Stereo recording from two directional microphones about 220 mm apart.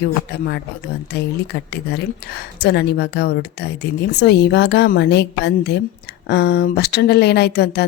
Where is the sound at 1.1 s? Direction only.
45° left (ahead or behind).